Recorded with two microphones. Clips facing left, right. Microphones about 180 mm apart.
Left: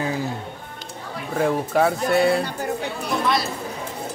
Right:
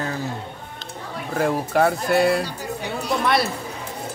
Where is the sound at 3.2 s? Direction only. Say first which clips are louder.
Right 2 dB; 65° right (ahead or behind).